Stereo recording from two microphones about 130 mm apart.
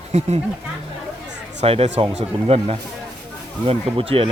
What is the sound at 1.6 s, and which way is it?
Speech, 50° right (ahead or behind).